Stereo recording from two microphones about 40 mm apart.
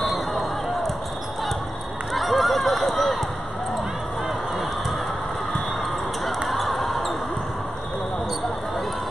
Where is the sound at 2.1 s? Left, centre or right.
Centre.